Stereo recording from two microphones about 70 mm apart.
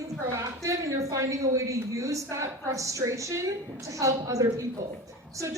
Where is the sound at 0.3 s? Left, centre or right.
Right.